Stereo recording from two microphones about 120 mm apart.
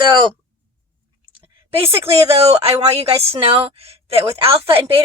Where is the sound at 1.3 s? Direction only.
50° right (ahead or behind).